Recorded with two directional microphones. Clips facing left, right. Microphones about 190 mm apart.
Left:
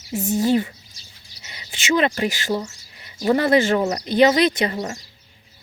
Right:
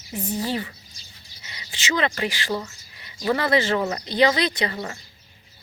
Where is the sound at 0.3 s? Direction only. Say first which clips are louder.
Left 8 dB; 45° left (ahead or behind).